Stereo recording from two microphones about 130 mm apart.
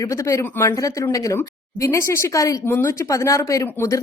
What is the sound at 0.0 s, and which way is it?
Speech, 25° left (ahead or behind).